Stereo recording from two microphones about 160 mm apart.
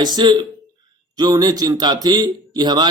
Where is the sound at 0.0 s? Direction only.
25° right (ahead or behind).